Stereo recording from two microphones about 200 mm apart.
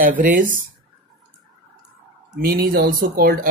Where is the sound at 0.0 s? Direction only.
45° right (ahead or behind).